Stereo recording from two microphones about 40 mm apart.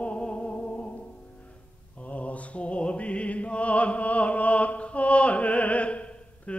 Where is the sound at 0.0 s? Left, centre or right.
Left.